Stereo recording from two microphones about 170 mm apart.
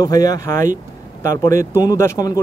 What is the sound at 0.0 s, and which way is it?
A man's voice, 20° left (ahead or behind).